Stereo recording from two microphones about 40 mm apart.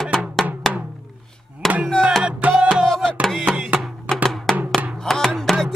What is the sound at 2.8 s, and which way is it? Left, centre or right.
Music, centre.